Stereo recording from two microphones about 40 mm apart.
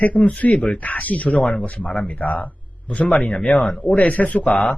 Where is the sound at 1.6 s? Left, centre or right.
Left.